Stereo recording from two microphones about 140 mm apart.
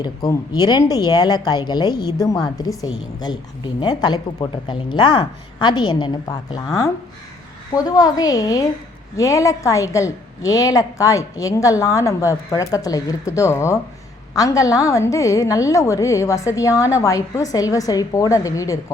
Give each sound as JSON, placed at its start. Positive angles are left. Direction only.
{"t": 0.0, "sound": "a woman's voice", "side_deg": 25}